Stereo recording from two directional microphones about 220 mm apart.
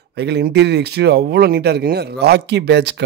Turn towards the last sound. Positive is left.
turn(degrees=-50)  # may be behind; listen again after turning